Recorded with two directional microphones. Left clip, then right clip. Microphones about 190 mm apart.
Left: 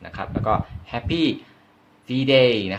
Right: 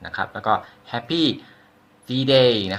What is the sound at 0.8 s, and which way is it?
Speech, 35° left (ahead or behind).